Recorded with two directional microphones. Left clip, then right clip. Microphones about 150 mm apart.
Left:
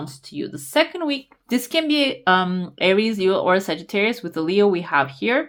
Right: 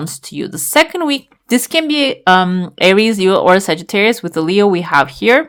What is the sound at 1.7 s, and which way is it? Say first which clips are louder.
Speech: right 4 dB; 35° right (ahead or behind).